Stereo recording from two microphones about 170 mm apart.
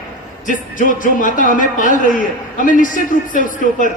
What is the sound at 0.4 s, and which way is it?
Speech, 50° left (ahead or behind).